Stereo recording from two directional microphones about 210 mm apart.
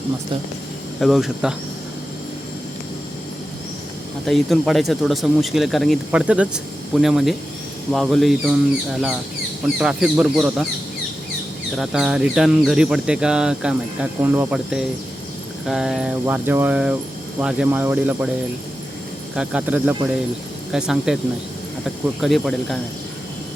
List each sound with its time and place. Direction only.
0.9 s speech: centre (ahead or behind)
4.3 s speech: centre (ahead or behind)
11.8 s speech: 5° right (ahead or behind)
19.4 s speech: 5° right (ahead or behind)
22.2 s speech: centre (ahead or behind)